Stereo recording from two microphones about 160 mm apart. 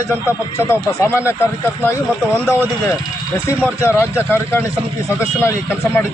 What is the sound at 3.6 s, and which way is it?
A man's voice, 15° left (ahead or behind).